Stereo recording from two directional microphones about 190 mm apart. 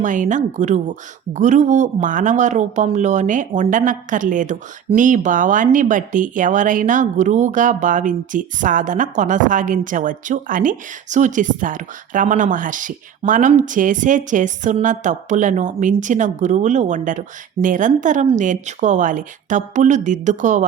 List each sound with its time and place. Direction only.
0.0 s a woman's voice: 40° right (ahead or behind)